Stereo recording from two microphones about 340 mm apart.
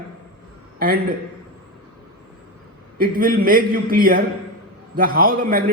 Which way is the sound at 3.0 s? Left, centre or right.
Right.